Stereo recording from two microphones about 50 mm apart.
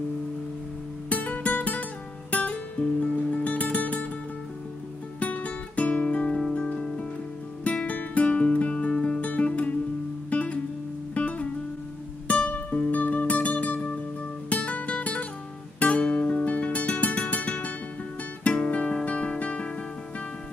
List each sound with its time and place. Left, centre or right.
1.0 s music: left
2.3 s guitar: left
5.2 s music: left
12.4 s music: left
18.4 s guitar: left